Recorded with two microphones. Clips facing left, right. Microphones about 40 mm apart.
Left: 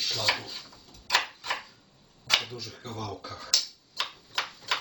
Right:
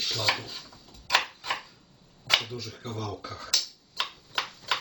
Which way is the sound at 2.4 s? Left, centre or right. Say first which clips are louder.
Even; centre.